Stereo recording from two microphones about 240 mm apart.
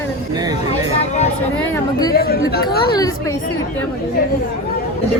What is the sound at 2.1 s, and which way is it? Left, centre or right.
Speech, left.